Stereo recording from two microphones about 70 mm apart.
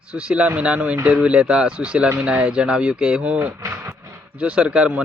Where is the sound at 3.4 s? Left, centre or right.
Right.